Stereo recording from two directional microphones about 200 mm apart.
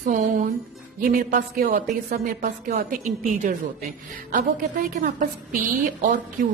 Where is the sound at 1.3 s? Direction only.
45° right (ahead or behind).